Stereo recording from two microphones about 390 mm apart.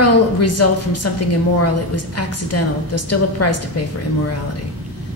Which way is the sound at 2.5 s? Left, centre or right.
Left.